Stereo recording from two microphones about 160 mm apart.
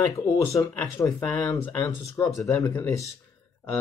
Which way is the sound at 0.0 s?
20° left (ahead or behind).